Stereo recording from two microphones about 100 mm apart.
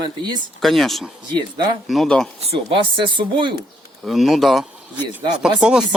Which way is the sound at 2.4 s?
60° right (ahead or behind).